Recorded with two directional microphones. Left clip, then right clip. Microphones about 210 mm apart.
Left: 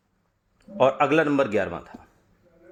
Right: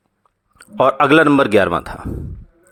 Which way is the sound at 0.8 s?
40° right (ahead or behind).